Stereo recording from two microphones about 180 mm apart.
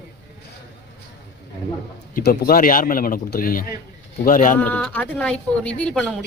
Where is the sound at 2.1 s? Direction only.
55° left (ahead or behind).